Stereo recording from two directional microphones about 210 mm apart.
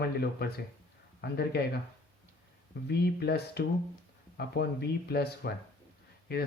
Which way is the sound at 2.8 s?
50° left (ahead or behind).